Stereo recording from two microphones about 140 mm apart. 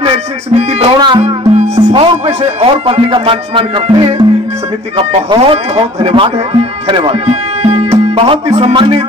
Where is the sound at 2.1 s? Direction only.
45° right (ahead or behind).